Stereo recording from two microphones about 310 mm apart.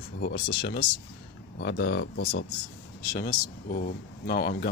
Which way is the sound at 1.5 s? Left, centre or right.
Left.